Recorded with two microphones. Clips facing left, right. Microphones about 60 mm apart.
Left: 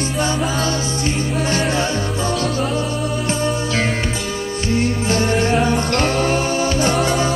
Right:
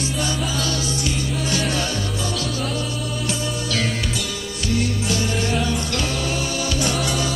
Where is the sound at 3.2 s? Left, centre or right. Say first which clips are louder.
Left 5 dB; left.